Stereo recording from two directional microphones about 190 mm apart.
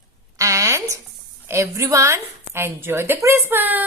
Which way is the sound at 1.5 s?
15° right (ahead or behind).